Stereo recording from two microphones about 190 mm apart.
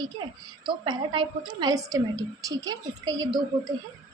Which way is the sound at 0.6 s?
25° right (ahead or behind).